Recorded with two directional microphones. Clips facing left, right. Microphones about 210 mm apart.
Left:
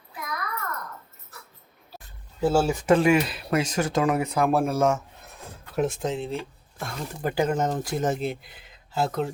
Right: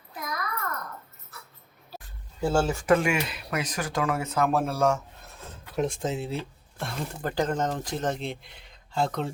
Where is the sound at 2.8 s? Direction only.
30° left (ahead or behind).